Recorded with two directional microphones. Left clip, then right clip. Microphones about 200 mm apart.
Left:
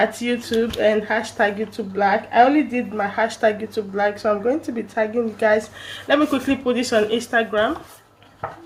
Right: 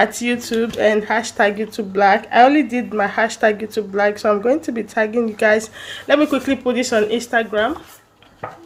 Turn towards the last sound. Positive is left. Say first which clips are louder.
# right 1 dB
turn(degrees=-25)  # may be behind; listen again after turning